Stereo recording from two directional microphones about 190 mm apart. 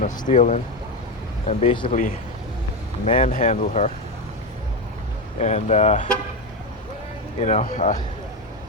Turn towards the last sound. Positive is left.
turn(degrees=45)  # may be behind; listen again after turning